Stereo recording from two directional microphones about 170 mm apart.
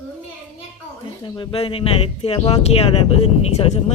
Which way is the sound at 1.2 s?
30° left (ahead or behind).